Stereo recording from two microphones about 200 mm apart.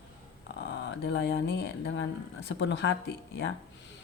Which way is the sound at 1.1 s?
65° left (ahead or behind).